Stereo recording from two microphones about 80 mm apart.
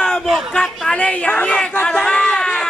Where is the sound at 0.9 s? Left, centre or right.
Centre.